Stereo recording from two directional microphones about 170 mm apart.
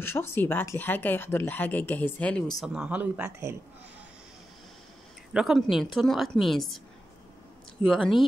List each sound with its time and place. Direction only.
0.0 s speech: 15° left (ahead or behind)
2.6 s speech: 5° right (ahead or behind)
5.3 s a woman's voice: centre (ahead or behind)
7.8 s a woman's voice: centre (ahead or behind)